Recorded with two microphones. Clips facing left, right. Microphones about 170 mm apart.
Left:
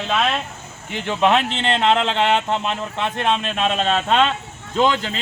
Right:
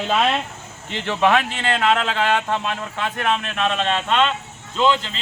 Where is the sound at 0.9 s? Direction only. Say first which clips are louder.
Left 1 dB; 15° left (ahead or behind).